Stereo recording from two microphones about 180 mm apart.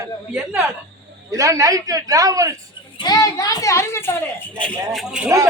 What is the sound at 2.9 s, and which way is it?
A child's voice, 20° left (ahead or behind).